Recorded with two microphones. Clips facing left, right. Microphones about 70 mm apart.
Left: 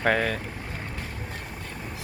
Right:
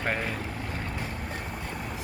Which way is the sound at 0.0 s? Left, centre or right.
Left.